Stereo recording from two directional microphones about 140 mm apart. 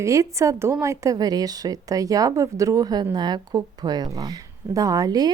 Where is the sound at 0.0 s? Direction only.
20° right (ahead or behind).